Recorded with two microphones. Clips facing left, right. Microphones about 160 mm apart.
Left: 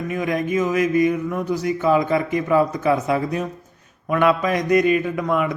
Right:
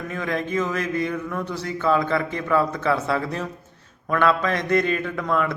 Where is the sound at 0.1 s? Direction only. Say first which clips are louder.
Left 4 dB; 15° left (ahead or behind).